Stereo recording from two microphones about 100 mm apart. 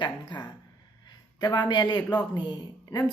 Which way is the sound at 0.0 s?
50° left (ahead or behind).